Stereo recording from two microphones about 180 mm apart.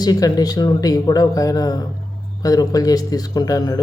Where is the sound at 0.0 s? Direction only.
20° left (ahead or behind).